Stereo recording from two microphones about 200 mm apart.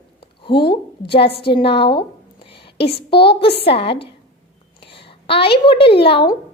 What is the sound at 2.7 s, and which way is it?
Speech, 55° left (ahead or behind).